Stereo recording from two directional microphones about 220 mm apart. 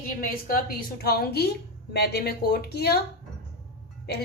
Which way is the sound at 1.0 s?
45° left (ahead or behind).